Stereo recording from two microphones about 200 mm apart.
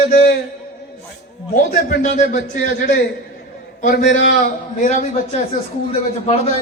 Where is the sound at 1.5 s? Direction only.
40° left (ahead or behind).